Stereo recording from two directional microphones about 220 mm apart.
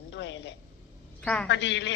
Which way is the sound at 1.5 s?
55° left (ahead or behind).